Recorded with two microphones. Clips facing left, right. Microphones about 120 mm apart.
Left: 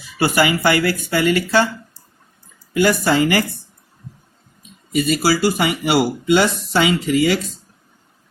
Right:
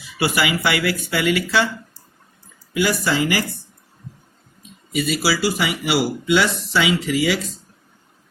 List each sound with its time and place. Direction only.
0.2 s speech: 45° left (ahead or behind)
2.7 s speech: 50° left (ahead or behind)
4.9 s speech: 50° left (ahead or behind)